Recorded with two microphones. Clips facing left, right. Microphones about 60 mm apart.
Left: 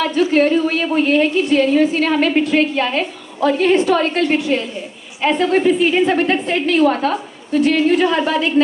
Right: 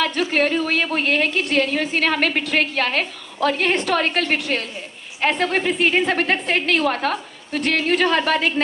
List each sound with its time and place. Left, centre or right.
0.0 s a woman's voice: right